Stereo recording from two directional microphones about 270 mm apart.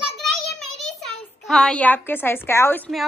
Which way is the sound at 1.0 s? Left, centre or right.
Centre.